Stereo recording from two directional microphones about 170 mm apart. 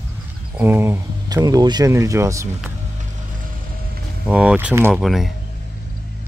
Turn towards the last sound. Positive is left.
turn(degrees=0)  # may be behind; listen again after turning